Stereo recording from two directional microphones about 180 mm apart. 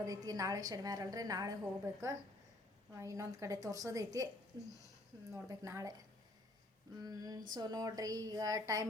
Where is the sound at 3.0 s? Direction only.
15° right (ahead or behind).